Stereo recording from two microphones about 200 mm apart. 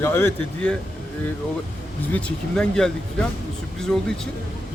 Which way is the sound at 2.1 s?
5° left (ahead or behind).